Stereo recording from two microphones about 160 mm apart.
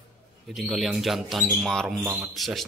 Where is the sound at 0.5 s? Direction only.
Centre (ahead or behind).